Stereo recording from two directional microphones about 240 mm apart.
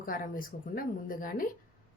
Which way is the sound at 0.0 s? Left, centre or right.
Left.